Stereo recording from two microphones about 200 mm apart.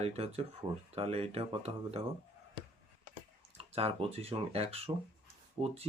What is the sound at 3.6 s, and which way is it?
Speech, 30° right (ahead or behind).